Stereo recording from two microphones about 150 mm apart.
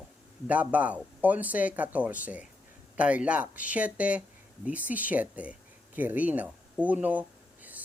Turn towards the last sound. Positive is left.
turn(degrees=-10)  # may be behind; listen again after turning